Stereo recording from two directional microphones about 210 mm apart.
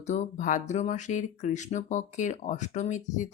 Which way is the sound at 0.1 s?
35° left (ahead or behind).